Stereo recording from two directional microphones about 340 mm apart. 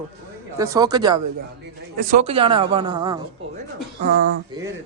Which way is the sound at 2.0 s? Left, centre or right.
Right.